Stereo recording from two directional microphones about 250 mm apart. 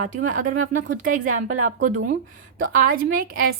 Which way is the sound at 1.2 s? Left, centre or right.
Right.